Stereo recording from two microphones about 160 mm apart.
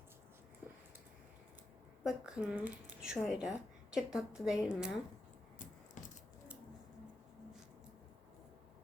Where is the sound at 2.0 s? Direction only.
5° right (ahead or behind).